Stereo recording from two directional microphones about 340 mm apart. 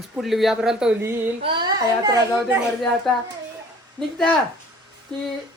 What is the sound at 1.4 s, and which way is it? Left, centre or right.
Speech, centre.